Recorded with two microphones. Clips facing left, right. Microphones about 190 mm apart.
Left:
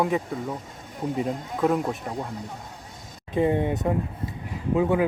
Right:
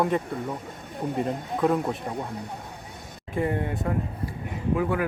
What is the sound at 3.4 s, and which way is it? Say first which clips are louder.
Speech: left 4 dB; 20° left (ahead or behind).